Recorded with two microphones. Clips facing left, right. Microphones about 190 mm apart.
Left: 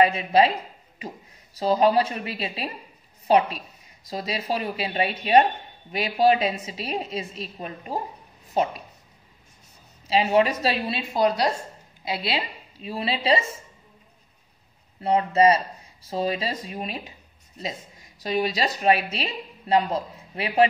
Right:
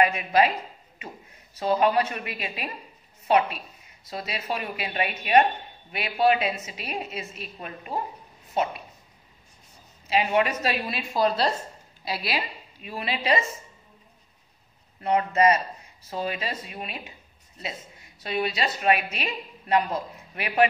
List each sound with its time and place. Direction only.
0.0 s a woman's voice: 30° left (ahead or behind)
1.6 s speech: 35° left (ahead or behind)
10.0 s a woman's voice: 30° left (ahead or behind)
15.0 s speech: 30° left (ahead or behind)
18.2 s a woman's voice: 40° left (ahead or behind)